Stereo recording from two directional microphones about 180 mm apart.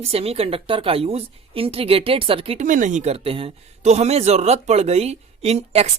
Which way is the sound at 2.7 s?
45° right (ahead or behind).